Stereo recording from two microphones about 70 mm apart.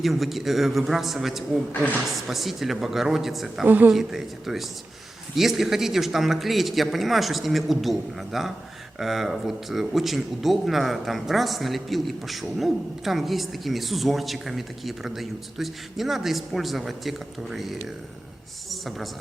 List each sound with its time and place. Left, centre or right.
0.0 s speech: centre
1.7 s a woman's voice: left
2.2 s speech: centre
3.7 s a woman's voice: right
3.9 s a man's voice: centre